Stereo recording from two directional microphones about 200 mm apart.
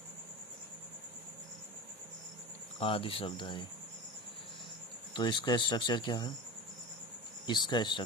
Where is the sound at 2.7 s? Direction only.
25° left (ahead or behind).